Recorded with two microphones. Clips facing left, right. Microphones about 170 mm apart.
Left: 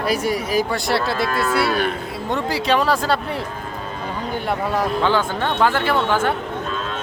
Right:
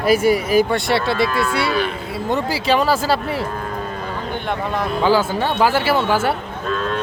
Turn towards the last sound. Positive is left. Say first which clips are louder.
# right 1 dB
turn(degrees=-5)  # may be behind; listen again after turning